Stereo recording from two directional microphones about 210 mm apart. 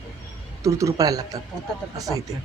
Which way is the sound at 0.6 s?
15° right (ahead or behind).